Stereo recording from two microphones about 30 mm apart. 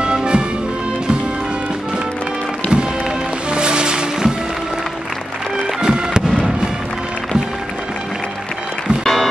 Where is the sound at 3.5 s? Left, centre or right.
Right.